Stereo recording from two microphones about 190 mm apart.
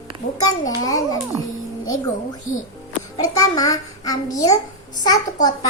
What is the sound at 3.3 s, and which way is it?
A child's voice, 20° left (ahead or behind).